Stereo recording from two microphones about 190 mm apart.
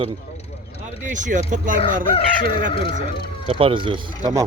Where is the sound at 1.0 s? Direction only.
40° right (ahead or behind).